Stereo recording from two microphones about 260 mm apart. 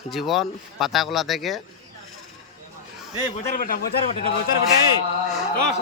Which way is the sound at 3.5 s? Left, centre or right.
Left.